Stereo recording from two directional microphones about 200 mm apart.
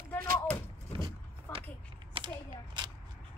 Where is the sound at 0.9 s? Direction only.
25° right (ahead or behind).